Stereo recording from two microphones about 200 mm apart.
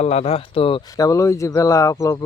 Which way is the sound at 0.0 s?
30° left (ahead or behind).